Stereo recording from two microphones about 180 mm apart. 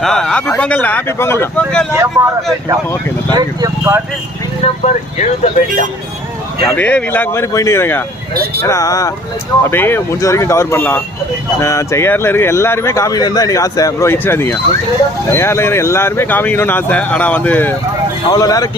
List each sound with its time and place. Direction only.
0.0 s speech: 5° left (ahead or behind)
2.2 s speech: 15° right (ahead or behind)
3.3 s speech: 15° right (ahead or behind)
4.6 s speech: 40° left (ahead or behind)
6.7 s speech: 10° left (ahead or behind)
18.3 s speech: 20° left (ahead or behind)